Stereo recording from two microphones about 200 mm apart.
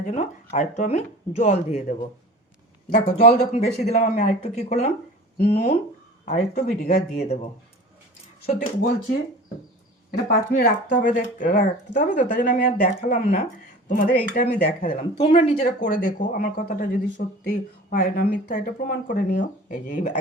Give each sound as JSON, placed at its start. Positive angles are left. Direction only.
{"t": 0.0, "sound": "speech", "side_deg": 35}
{"t": 3.2, "sound": "speech", "side_deg": 35}
{"t": 8.4, "sound": "speech", "side_deg": 40}
{"t": 10.1, "sound": "speech", "side_deg": 45}
{"t": 15.6, "sound": "speech", "side_deg": 40}